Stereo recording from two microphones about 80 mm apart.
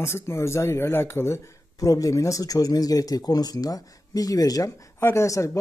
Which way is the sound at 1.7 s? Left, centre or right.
Left.